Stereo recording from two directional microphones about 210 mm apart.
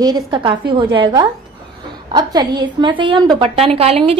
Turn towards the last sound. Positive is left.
turn(degrees=-30)  # may be behind; listen again after turning